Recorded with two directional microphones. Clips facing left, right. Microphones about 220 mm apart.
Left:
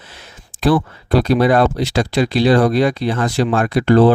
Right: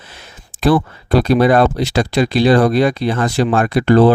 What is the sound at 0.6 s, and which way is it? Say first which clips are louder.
Speech: right 1 dB; 55° right (ahead or behind).